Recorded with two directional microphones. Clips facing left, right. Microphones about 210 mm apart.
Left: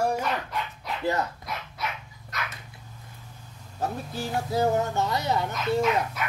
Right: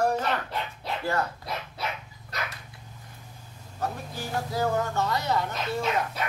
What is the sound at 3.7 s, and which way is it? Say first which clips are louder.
Speech: left 2 dB; 25° left (ahead or behind).